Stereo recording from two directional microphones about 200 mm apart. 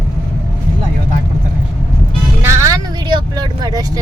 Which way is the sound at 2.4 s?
15° right (ahead or behind).